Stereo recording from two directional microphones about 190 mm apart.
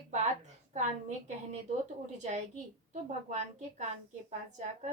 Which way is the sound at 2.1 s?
40° right (ahead or behind).